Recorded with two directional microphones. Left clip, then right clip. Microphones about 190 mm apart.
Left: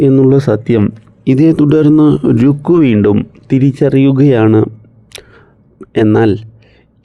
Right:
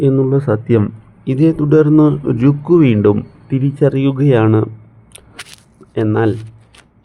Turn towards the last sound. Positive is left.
turn(degrees=35)  # may be behind; listen again after turning